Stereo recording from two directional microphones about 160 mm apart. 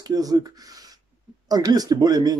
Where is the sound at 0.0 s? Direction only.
25° right (ahead or behind).